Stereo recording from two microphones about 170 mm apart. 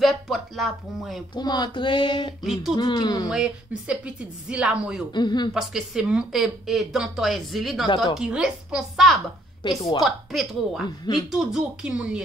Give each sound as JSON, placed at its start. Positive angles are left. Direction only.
{"t": 0.0, "sound": "speech", "side_deg": 0}
{"t": 1.3, "sound": "speech", "side_deg": 25}
{"t": 2.4, "sound": "speech", "side_deg": 0}
{"t": 2.7, "sound": "speech", "side_deg": 25}
{"t": 3.3, "sound": "speech", "side_deg": -5}
{"t": 5.1, "sound": "speech", "side_deg": 25}
{"t": 5.5, "sound": "speech", "side_deg": -5}
{"t": 9.6, "sound": "speech", "side_deg": 25}
{"t": 10.0, "sound": "speech", "side_deg": 0}